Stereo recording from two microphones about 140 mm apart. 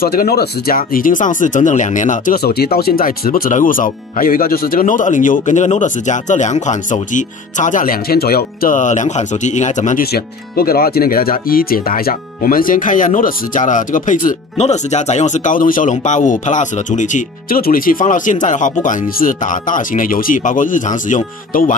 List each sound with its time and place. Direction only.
0.0 s speech: 90° left; by 14.3 s 75° left (ahead or behind)
14.6 s speech: 55° left (ahead or behind); by 21.7 s 70° left (ahead or behind)